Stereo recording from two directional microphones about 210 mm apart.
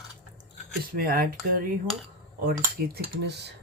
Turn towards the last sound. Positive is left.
turn(degrees=-55)  # may be behind; listen again after turning